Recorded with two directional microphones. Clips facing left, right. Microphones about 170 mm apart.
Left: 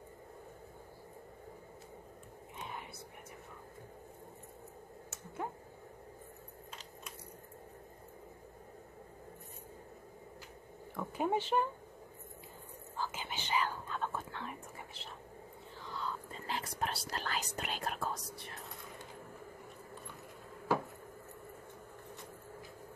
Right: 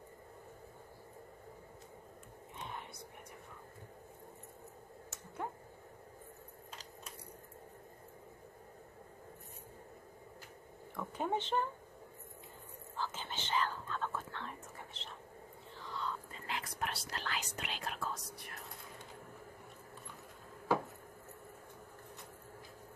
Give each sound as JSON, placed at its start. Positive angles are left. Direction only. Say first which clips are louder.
{"t": 11.0, "sound": "speech", "louder": "left 3 dB", "side_deg": 10}
{"t": 12.9, "sound": "whispering", "louder": "left 1 dB", "side_deg": 10}
{"t": 16.3, "sound": "whispering", "louder": "left 3 dB", "side_deg": 35}